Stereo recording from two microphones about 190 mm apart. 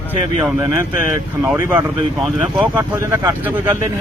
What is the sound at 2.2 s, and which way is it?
Speech, centre (ahead or behind).